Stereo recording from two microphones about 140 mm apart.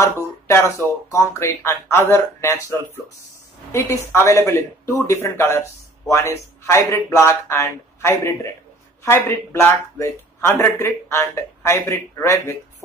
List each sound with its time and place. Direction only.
0.0 s a man's voice: 20° left (ahead or behind)
4.1 s a man's voice: 20° left (ahead or behind)